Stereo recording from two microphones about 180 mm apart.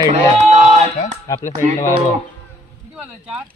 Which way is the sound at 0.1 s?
40° right (ahead or behind).